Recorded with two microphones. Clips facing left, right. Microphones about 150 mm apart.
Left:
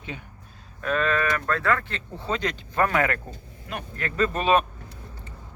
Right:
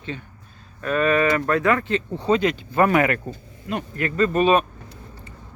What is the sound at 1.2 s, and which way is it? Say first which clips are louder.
Speech: right 6 dB; 20° right (ahead or behind).